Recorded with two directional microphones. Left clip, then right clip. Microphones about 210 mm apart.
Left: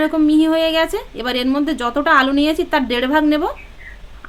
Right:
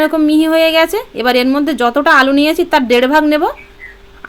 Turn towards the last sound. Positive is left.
turn(degrees=-25)  # may be behind; listen again after turning